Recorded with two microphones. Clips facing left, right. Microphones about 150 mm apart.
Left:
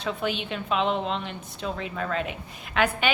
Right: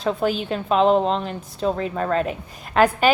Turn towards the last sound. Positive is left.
turn(degrees=-40)  # may be behind; listen again after turning